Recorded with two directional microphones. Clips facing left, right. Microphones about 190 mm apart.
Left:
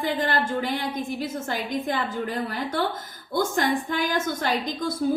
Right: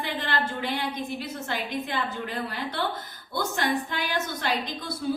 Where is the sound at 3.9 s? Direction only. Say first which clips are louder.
Left 5 dB; 45° left (ahead or behind).